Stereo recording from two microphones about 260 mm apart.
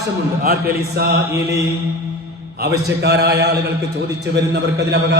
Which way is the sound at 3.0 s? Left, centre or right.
Right.